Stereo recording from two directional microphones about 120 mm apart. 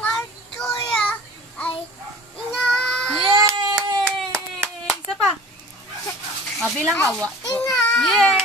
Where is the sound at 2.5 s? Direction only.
5° left (ahead or behind).